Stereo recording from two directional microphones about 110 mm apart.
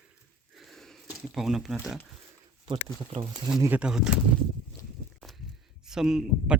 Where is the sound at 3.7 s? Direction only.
10° right (ahead or behind).